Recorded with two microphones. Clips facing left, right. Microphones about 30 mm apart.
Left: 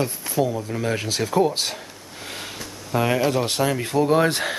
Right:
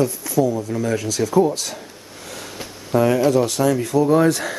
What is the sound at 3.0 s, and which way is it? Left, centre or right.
Speech, left.